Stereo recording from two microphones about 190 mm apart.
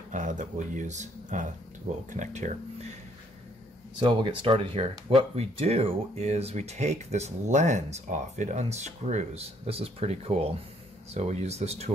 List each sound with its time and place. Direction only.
0.1 s speech: 40° right (ahead or behind)
4.0 s speech: 25° right (ahead or behind)